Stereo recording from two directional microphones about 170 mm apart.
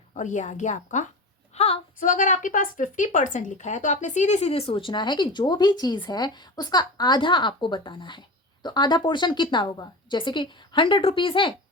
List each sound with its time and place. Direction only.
0.1 s a woman's voice: 45° left (ahead or behind)
1.5 s a sound: 35° left (ahead or behind)
2.0 s a woman's voice: 50° left (ahead or behind); by 11.5 s 30° left (ahead or behind)